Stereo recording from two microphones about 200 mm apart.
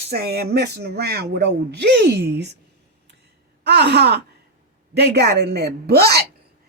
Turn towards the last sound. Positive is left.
turn(degrees=-50)  # may be behind; listen again after turning